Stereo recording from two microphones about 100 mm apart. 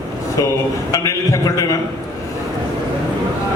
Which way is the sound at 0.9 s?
35° left (ahead or behind).